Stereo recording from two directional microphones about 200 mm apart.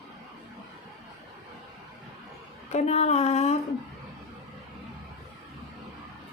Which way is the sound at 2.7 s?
35° left (ahead or behind).